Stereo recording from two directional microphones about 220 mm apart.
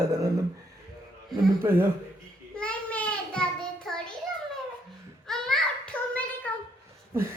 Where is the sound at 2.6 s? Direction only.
5° left (ahead or behind).